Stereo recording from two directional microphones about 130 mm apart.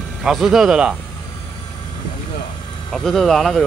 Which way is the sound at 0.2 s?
Centre (ahead or behind).